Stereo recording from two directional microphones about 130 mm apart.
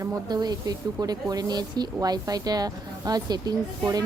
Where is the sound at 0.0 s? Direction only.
30° right (ahead or behind).